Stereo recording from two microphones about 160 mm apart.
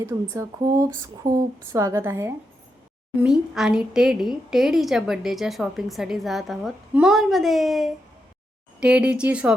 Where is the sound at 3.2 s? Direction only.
5° right (ahead or behind).